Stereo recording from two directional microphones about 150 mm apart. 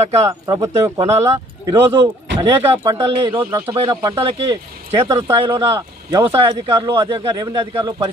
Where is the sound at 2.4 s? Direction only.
35° right (ahead or behind).